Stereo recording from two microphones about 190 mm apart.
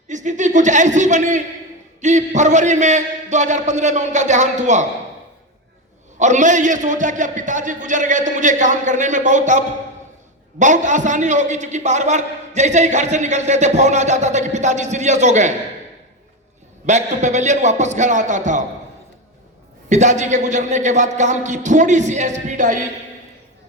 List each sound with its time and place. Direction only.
0.1 s a sound: 40° right (ahead or behind)
2.0 s a man's voice: 40° right (ahead or behind)
6.1 s a man's voice: 40° right (ahead or behind)
16.8 s a man's voice: 40° right (ahead or behind)
19.9 s a man's voice: 40° right (ahead or behind)